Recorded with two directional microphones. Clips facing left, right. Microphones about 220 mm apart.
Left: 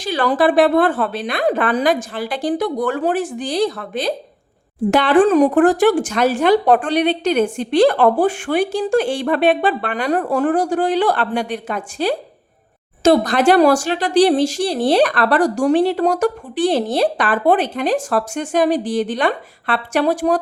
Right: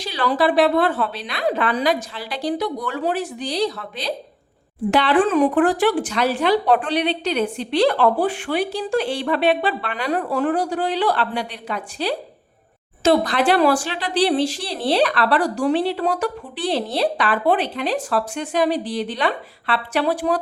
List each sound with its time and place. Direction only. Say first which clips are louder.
0.0 s speech: left 4 dB; 50° left (ahead or behind)